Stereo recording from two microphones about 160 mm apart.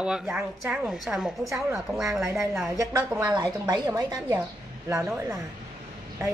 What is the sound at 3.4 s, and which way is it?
A woman's voice, 25° right (ahead or behind).